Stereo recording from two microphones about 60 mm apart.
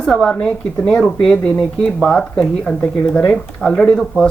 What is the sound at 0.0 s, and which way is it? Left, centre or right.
Speech, centre.